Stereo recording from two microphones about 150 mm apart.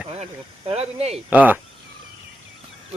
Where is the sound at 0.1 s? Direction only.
45° right (ahead or behind).